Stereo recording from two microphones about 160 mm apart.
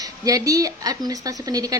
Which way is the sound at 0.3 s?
20° right (ahead or behind).